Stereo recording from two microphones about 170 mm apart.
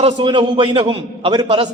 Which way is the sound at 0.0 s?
30° right (ahead or behind).